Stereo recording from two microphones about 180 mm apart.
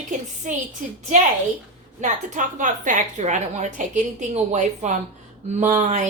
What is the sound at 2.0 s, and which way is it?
A woman's voice, 45° right (ahead or behind).